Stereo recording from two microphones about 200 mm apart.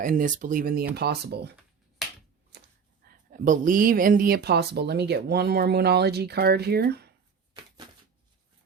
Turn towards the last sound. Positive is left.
turn(degrees=-55)  # may be behind; listen again after turning